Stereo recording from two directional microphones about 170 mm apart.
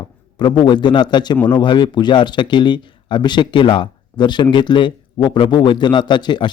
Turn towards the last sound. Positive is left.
turn(degrees=25)  # may be behind; listen again after turning